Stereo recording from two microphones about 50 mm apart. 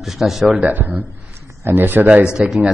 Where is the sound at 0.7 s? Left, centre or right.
Right.